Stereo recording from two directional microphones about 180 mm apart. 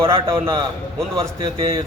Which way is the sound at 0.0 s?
20° right (ahead or behind).